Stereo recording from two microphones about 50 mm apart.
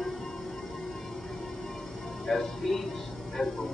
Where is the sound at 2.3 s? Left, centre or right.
Centre.